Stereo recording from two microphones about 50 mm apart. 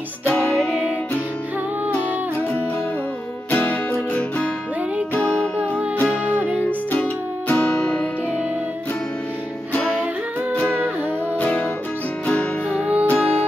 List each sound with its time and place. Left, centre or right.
3.4 s music: left
5.2 s music: left
6.2 s music: right
7.5 s music: left
11.3 s music: left
13.0 s music: left